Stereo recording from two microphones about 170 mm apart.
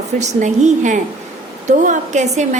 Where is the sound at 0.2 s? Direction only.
45° right (ahead or behind).